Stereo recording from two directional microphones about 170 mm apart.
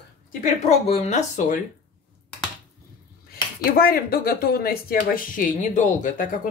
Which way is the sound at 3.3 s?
60° left (ahead or behind).